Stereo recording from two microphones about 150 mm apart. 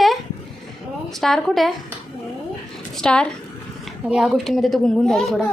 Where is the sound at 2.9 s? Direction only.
5° left (ahead or behind).